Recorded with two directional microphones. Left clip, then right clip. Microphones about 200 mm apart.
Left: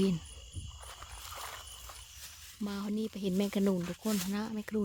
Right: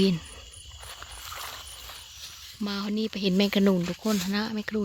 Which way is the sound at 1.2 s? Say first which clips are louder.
Right 5 dB; 5° right (ahead or behind).